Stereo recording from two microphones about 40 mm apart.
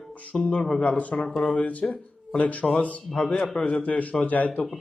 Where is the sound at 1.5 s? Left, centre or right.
Left.